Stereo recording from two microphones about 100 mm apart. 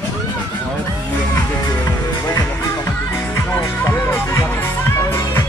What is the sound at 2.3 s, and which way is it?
Music, 35° left (ahead or behind).